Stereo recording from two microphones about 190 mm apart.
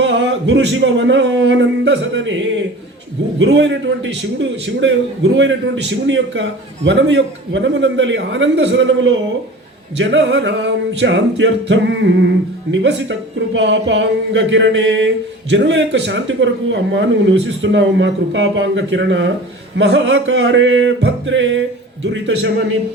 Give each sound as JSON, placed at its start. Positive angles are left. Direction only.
{"t": 0.0, "sound": "speech", "side_deg": -75}
{"t": 3.3, "sound": "speech", "side_deg": -75}